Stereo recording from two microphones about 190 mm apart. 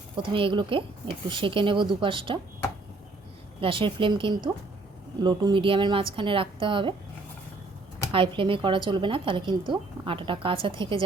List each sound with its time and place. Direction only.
0.2 s a woman's voice: 25° right (ahead or behind)
3.6 s a woman's voice: 25° right (ahead or behind)
8.1 s a woman's voice: 25° right (ahead or behind)